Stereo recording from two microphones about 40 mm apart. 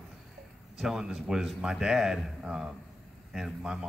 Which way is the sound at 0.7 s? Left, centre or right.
Centre.